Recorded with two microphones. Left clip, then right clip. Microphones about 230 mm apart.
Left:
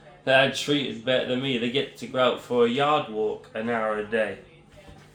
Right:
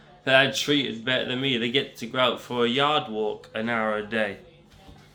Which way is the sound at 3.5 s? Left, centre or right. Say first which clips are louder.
Right 2 dB; right.